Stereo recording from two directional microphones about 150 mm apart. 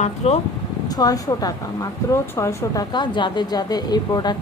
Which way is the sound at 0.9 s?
25° left (ahead or behind).